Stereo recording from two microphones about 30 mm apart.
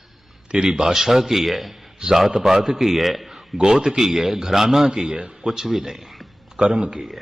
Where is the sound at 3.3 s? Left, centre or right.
Centre.